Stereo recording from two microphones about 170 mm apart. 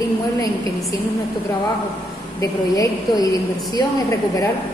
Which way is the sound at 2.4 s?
20° left (ahead or behind).